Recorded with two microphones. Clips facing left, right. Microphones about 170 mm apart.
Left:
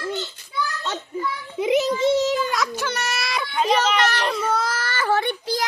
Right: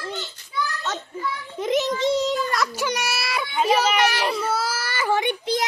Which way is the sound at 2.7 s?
10° right (ahead or behind).